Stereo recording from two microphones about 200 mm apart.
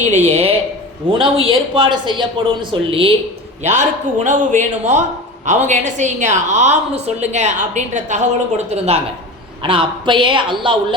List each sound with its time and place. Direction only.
0.0 s a man's voice: 35° right (ahead or behind)
3.6 s a woman's voice: 35° right (ahead or behind)